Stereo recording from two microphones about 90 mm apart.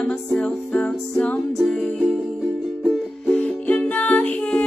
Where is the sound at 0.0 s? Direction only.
10° left (ahead or behind).